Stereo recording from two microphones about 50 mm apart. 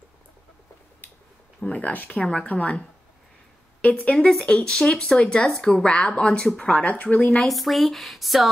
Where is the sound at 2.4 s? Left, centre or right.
Left.